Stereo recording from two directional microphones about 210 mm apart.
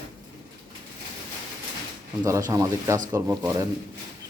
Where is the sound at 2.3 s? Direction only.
15° right (ahead or behind).